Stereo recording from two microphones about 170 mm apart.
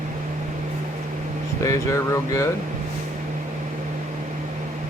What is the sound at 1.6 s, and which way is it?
Speech, 20° left (ahead or behind).